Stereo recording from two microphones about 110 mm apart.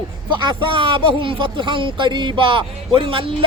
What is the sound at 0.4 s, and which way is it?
Speech, 50° right (ahead or behind).